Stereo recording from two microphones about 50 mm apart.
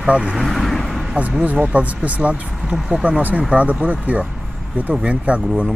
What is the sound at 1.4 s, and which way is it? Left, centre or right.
Speech, right.